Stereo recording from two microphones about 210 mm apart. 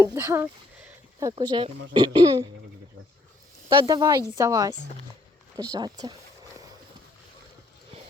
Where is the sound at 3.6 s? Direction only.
20° right (ahead or behind).